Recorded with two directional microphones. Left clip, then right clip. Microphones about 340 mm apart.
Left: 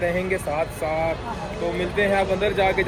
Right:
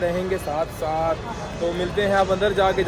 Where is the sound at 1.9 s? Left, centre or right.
Centre.